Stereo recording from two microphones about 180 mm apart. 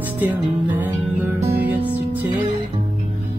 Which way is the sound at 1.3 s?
10° right (ahead or behind).